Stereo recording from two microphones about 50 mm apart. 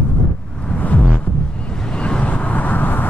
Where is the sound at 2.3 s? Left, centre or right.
Left.